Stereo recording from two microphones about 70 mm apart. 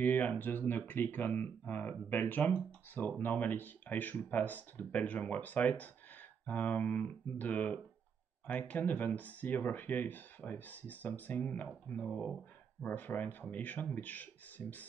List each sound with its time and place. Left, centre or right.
0.0 s speech: left
12.1 s speech: centre
12.8 s speech: left